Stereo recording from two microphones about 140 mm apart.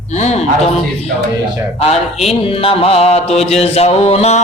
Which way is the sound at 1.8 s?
50° left (ahead or behind).